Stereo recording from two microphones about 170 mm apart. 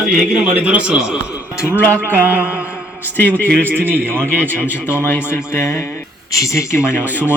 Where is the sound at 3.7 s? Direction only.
10° right (ahead or behind).